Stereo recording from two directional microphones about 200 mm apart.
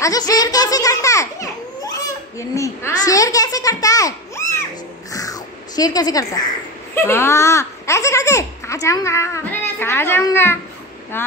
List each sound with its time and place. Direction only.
0.0 s a child's voice: 20° left (ahead or behind)
5.1 s a sound: 15° left (ahead or behind)
7.0 s speech: 15° left (ahead or behind)